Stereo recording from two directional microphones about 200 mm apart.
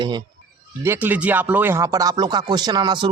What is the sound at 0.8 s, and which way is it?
Speech, 10° right (ahead or behind).